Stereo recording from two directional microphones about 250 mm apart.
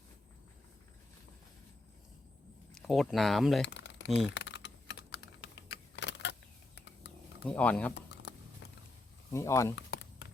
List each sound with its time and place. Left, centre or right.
2.7 s speech: centre
3.7 s a sound: left
4.3 s typing: left
7.4 s speech: centre
9.3 s speech: centre
9.7 s a sound: left